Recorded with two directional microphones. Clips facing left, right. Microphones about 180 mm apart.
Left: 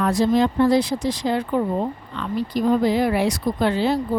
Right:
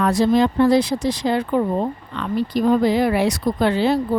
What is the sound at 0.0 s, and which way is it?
Speech, 75° right (ahead or behind).